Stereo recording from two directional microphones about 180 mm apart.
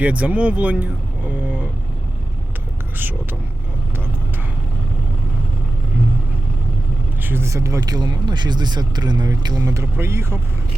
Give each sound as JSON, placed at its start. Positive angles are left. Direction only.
{"t": 0.0, "sound": "speech", "side_deg": -10}
{"t": 7.2, "sound": "speech", "side_deg": -10}